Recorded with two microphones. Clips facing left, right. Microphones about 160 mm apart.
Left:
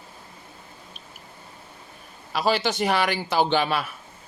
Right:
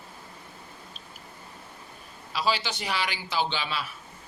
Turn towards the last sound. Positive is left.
turn(degrees=55)  # may be behind; listen again after turning